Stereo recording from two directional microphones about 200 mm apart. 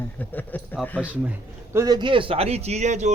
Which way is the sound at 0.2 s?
10° left (ahead or behind).